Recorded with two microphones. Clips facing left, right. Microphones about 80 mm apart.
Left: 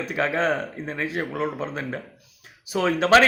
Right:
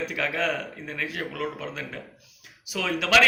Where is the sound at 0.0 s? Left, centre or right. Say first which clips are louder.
Left 4 dB; left.